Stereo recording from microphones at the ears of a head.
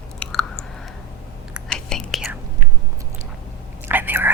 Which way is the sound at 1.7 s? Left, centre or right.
Left.